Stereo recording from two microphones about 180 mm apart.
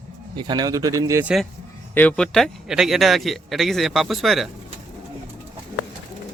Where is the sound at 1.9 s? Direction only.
5° left (ahead or behind).